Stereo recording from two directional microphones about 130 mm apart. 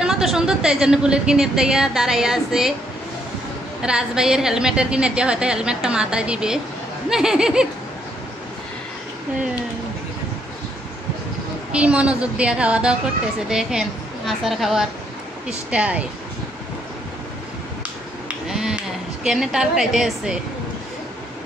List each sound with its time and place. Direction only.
0.0 s a woman's voice: 5° right (ahead or behind)
3.8 s a woman's voice: 5° right (ahead or behind)
11.7 s a woman's voice: 10° right (ahead or behind)
18.5 s a sound: 5° right (ahead or behind)